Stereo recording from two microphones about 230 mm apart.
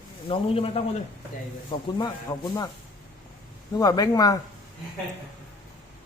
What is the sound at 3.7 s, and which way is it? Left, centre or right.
Speech, centre.